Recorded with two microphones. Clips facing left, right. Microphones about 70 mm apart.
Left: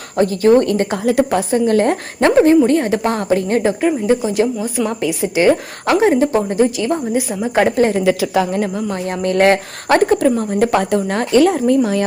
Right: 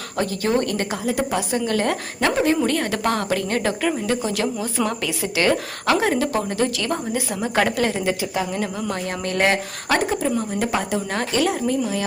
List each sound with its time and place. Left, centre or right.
0.2 s a woman's voice: left
1.0 s a woman's voice: left
1.4 s a woman's voice: left
2.6 s a woman's voice: left
7.6 s a woman's voice: left
8.0 s a woman's voice: left
8.9 s speech: left
11.1 s speech: left